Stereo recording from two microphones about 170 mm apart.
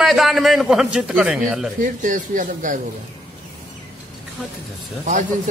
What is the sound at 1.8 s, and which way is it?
Speech, 50° right (ahead or behind).